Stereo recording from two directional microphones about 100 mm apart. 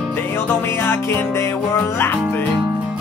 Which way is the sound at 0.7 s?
25° left (ahead or behind).